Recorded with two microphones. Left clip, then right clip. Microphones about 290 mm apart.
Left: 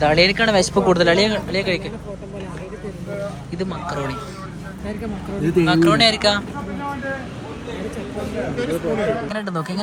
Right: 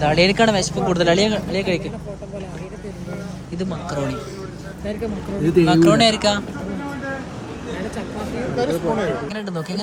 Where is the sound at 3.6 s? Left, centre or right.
Centre.